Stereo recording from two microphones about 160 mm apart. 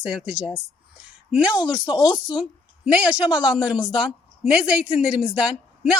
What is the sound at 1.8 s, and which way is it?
Speech, 30° left (ahead or behind).